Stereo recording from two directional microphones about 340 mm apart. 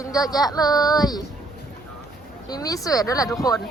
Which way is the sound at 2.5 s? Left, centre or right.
Centre.